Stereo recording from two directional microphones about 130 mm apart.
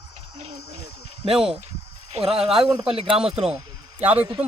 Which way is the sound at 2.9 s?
45° right (ahead or behind).